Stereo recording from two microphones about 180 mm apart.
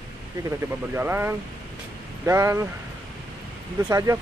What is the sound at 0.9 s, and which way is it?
Speech, 10° right (ahead or behind).